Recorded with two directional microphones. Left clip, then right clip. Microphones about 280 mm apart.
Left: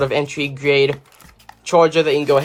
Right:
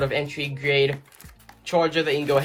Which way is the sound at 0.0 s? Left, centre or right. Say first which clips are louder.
Left 6 dB; centre.